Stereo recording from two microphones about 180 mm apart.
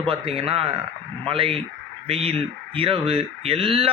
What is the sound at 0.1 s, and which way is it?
A man's voice, 35° right (ahead or behind).